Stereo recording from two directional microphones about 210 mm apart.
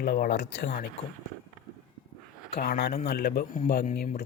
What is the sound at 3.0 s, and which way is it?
Speech, 50° left (ahead or behind).